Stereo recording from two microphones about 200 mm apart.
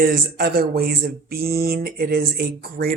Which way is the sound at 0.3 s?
50° right (ahead or behind).